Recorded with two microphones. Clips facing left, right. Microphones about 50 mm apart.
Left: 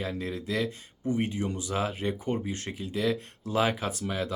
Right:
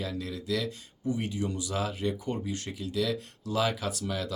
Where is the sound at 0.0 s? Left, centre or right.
Left.